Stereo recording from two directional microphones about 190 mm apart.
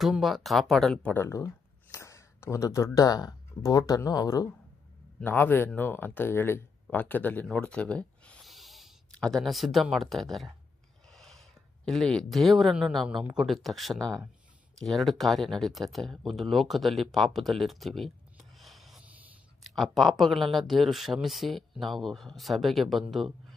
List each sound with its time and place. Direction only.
0.0 s speech: centre (ahead or behind)
11.1 s a sound: centre (ahead or behind)
11.9 s speech: centre (ahead or behind)